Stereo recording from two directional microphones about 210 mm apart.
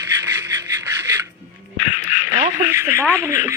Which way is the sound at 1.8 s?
35° left (ahead or behind).